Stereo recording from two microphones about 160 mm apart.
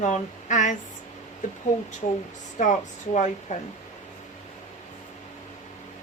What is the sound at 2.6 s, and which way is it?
Speech, 50° left (ahead or behind).